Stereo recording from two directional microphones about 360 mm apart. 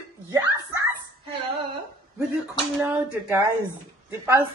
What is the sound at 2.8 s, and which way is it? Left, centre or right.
Speech, centre.